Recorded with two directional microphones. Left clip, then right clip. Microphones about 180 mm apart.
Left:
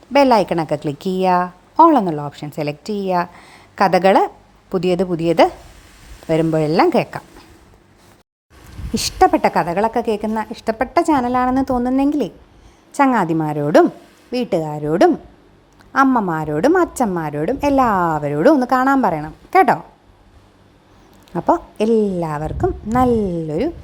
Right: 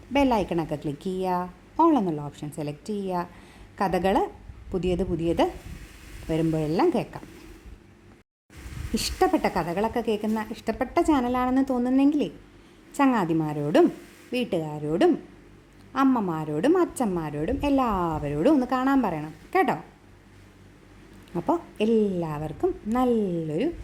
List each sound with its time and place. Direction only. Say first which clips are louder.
0.1 s a woman's voice: left 10 dB; 15° left (ahead or behind)
9.0 s a woman's voice: left 10 dB; 25° left (ahead or behind)
21.3 s a woman's voice: left 9 dB; 20° left (ahead or behind)